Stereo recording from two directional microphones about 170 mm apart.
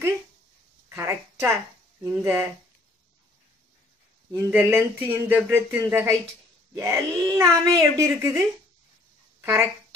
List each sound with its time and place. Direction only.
0.8 s a woman's voice: 15° right (ahead or behind)
4.5 s speech: 10° right (ahead or behind)
6.7 s wail: 15° right (ahead or behind)
7.4 s speech: 5° left (ahead or behind)
8.0 s speech: 15° right (ahead or behind)
9.4 s speech: 15° right (ahead or behind)